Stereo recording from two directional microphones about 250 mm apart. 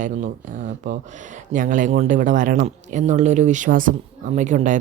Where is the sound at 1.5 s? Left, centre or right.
Right.